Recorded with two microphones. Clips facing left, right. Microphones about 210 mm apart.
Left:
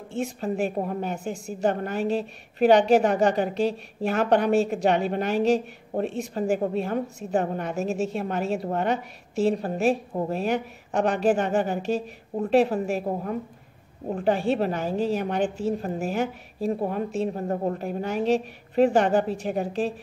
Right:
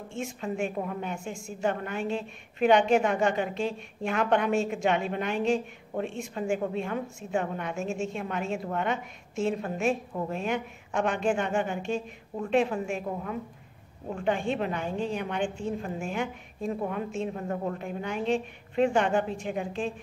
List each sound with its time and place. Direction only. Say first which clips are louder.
0.1 s a woman's voice: left 6 dB; 35° left (ahead or behind)